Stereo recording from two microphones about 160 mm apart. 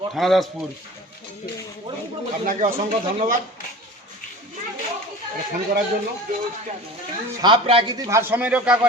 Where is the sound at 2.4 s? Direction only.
55° right (ahead or behind).